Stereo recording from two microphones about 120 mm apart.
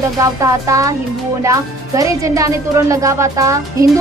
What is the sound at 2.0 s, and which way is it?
Speech, 30° right (ahead or behind).